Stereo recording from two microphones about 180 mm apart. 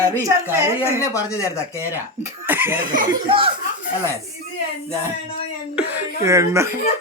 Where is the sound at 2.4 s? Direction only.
10° right (ahead or behind).